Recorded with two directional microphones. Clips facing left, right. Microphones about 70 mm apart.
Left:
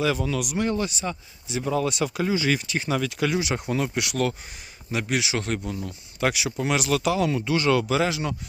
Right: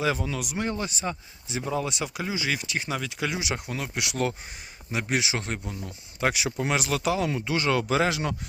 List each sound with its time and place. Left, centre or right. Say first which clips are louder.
0.0 s speech: left 3 dB; right
1.6 s speech: left 5 dB; centre
3.5 s speech: left 6 dB; centre
3.9 s a man's voice: left 3 dB; centre; by 8.4 s right